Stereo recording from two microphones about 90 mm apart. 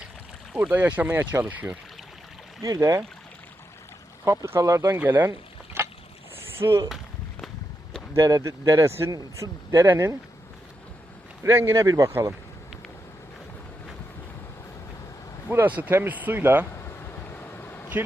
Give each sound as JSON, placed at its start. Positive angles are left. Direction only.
{"t": 0.5, "sound": "speech", "side_deg": -20}
{"t": 2.6, "sound": "speech", "side_deg": -35}
{"t": 4.3, "sound": "speech", "side_deg": -30}
{"t": 4.9, "sound": "speech", "side_deg": -20}
{"t": 6.3, "sound": "rowboat", "side_deg": -25}
{"t": 8.1, "sound": "speech", "side_deg": -35}
{"t": 11.4, "sound": "speech", "side_deg": -30}
{"t": 15.4, "sound": "speech", "side_deg": -20}
{"t": 16.7, "sound": "vehicle", "side_deg": 25}